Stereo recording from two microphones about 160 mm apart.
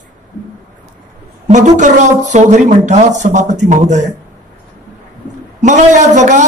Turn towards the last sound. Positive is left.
turn(degrees=-50)  # may be behind; listen again after turning